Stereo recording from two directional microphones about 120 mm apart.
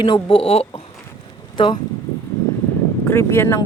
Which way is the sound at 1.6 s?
40° left (ahead or behind).